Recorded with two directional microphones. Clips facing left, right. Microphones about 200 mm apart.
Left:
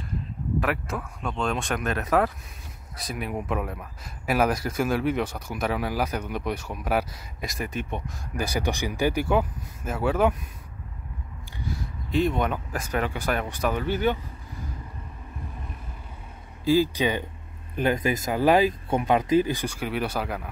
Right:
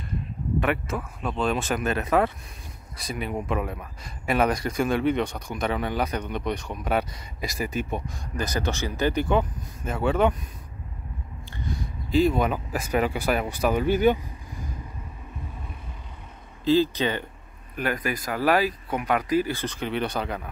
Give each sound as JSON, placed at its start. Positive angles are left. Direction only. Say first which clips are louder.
{"t": 0.6, "sound": "speech", "louder": "right 2 dB", "side_deg": 0}
{"t": 8.4, "sound": "speech", "louder": "even", "side_deg": 10}
{"t": 11.5, "sound": "speech", "louder": "right 1 dB", "side_deg": 5}
{"t": 16.6, "sound": "speech", "louder": "even", "side_deg": 10}
{"t": 17.7, "sound": "speech", "louder": "left 4 dB", "side_deg": 25}